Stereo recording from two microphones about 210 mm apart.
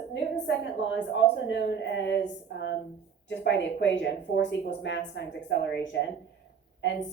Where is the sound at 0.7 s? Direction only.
60° left (ahead or behind).